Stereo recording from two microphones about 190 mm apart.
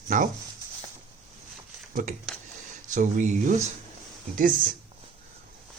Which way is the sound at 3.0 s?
40° right (ahead or behind).